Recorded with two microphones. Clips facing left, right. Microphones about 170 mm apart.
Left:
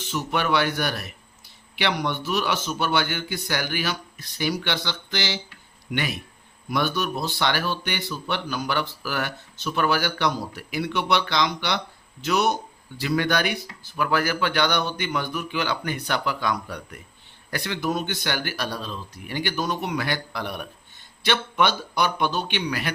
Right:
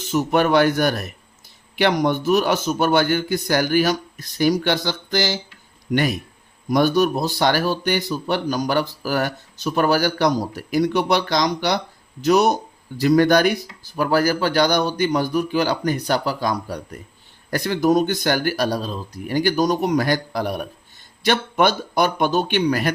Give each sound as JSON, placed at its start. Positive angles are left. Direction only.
{"t": 0.1, "sound": "speech", "side_deg": -45}